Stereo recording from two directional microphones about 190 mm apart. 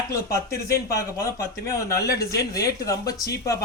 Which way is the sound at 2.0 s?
55° left (ahead or behind).